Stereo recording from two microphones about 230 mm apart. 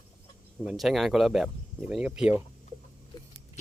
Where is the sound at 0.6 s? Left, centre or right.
Centre.